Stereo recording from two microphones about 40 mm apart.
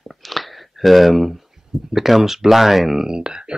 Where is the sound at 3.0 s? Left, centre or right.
Right.